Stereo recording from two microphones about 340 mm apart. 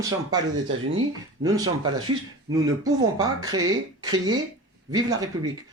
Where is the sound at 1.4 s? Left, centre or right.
Centre.